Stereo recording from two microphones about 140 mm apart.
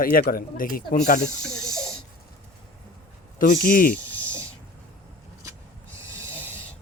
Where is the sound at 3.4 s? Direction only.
85° left.